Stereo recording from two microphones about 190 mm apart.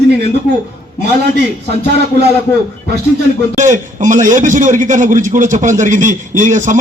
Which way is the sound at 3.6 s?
40° right (ahead or behind).